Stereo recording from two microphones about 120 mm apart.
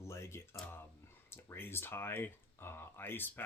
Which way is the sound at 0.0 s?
20° left (ahead or behind).